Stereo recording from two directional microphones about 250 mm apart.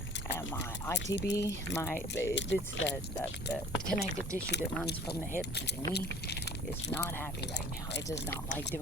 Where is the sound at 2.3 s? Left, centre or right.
Left.